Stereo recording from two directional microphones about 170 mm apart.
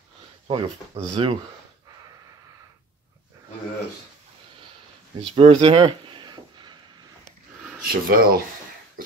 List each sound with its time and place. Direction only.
0.5 s speech: 30° right (ahead or behind)
5.2 s a sound: 35° right (ahead or behind)
7.8 s speech: 60° right (ahead or behind)